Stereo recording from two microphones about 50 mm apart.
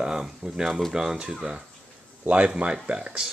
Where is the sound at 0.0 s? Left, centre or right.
Centre.